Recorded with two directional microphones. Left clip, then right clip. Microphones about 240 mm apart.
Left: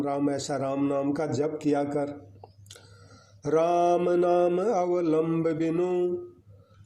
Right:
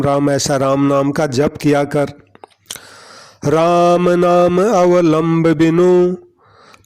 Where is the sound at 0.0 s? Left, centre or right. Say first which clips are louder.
Right 13 dB; right.